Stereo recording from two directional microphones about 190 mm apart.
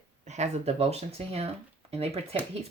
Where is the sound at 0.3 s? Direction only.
35° right (ahead or behind).